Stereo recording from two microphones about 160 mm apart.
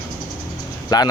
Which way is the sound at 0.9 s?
25° left (ahead or behind).